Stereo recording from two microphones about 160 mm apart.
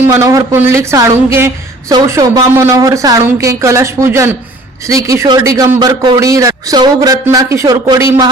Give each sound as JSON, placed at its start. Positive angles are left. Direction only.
{"t": 0.0, "sound": "speech", "side_deg": -20}